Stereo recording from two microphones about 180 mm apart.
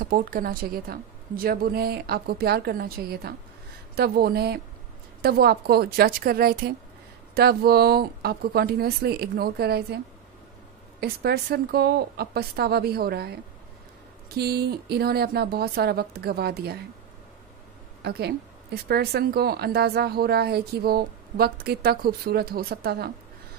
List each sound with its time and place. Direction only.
0.0 s a woman's voice: 50° right (ahead or behind)
11.0 s a woman's voice: 60° right (ahead or behind)
18.0 s a woman's voice: 60° right (ahead or behind)